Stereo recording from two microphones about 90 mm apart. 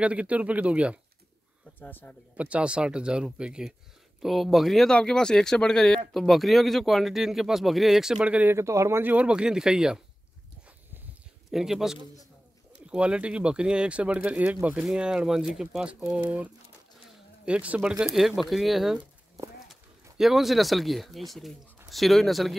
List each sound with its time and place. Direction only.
0.0 s speech: 15° right (ahead or behind)
1.8 s a man's voice: 20° left (ahead or behind)
2.3 s speech: 15° right (ahead or behind)
8.5 s speech: 35° right (ahead or behind)
9.0 s speech: 15° right (ahead or behind)
11.5 s speech: 5° right (ahead or behind)
17.5 s speech: 15° right (ahead or behind)
18.1 s speech: centre (ahead or behind)